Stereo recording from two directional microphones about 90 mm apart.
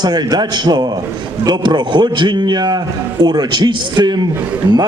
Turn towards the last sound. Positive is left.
turn(degrees=-50)  # may be behind; listen again after turning